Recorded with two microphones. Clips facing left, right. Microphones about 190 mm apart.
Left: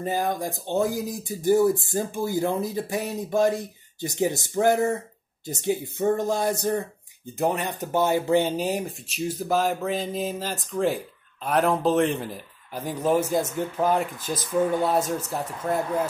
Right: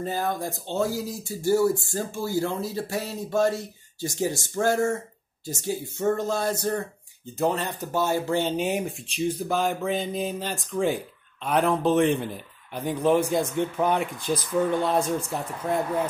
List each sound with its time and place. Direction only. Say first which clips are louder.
0.0 s speech: left 2 dB; 15° left (ahead or behind)
8.5 s speech: even; centre (ahead or behind)